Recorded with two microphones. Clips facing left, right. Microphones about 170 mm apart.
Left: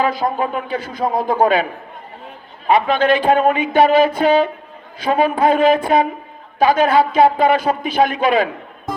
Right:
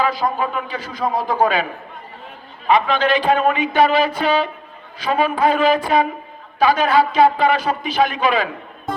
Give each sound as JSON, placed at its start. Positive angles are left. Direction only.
{"t": 0.0, "sound": "a man's voice", "side_deg": 50}
{"t": 2.6, "sound": "a man's voice", "side_deg": 45}